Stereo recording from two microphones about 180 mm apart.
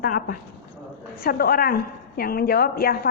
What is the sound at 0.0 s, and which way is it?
A woman's voice, 50° left (ahead or behind).